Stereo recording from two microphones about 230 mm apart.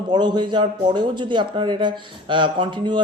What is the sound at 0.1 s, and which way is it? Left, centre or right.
A man's voice, centre.